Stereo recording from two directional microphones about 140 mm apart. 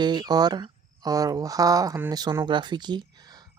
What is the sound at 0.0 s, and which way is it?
Speech, 30° right (ahead or behind).